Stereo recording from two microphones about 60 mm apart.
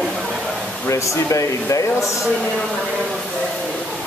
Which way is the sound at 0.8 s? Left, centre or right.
Left.